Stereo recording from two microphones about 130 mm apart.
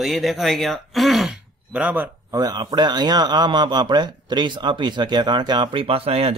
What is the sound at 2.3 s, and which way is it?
A man's voice, 30° right (ahead or behind).